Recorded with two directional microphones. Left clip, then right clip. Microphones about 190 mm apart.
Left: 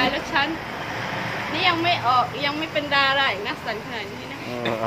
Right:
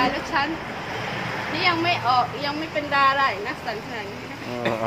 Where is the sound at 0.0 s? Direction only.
Centre (ahead or behind).